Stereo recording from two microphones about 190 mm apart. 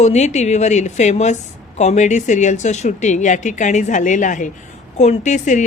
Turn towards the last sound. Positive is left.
turn(degrees=40)  # may be behind; listen again after turning